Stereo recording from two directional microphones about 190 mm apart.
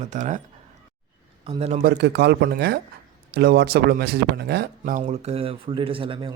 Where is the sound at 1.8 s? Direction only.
60° right (ahead or behind).